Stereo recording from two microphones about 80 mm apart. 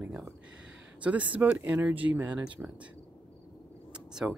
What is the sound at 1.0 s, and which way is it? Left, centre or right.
Speech, centre.